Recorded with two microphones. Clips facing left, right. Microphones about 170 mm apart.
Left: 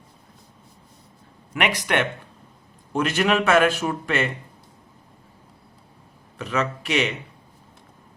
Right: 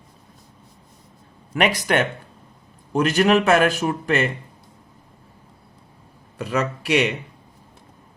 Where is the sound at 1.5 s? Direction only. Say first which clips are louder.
Right 3 dB; 40° right (ahead or behind).